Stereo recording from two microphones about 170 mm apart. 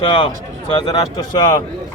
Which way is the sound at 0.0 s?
30° left (ahead or behind).